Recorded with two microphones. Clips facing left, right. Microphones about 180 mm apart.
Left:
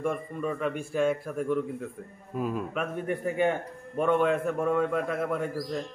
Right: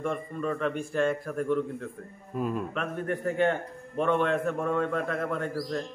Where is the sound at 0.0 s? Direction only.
5° left (ahead or behind).